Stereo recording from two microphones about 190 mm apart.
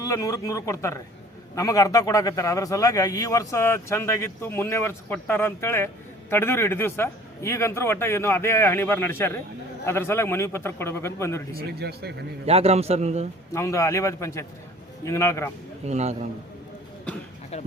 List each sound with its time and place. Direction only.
0.0 s a man's voice: 20° left (ahead or behind)
11.5 s speech: 60° right (ahead or behind)
12.5 s a man's voice: 30° right (ahead or behind)
13.5 s a man's voice: 15° left (ahead or behind)
15.9 s a man's voice: 35° right (ahead or behind)
17.5 s speech: 35° left (ahead or behind)